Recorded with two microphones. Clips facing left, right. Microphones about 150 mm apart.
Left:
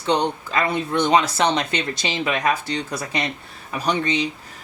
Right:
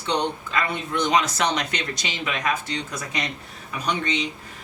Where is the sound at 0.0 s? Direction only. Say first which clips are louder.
Left 4 dB; 35° left (ahead or behind).